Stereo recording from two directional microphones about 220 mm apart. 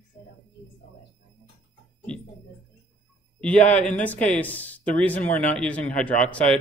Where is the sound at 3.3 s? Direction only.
5° left (ahead or behind).